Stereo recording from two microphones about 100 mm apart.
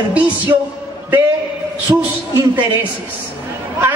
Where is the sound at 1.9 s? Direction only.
35° right (ahead or behind).